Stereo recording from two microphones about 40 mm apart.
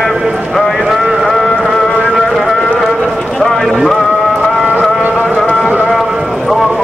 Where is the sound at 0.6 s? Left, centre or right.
Centre.